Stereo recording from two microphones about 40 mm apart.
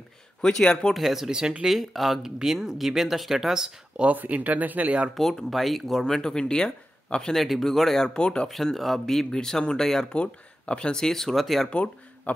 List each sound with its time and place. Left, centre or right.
0.4 s speech: centre
0.9 s speech: centre
4.0 s speech: right
5.1 s speech: centre
6.0 s speech: centre
7.3 s speech: centre
8.0 s speech: left
8.7 s speech: centre
10.0 s speech: left; by 11.7 s centre
11.7 s speech: left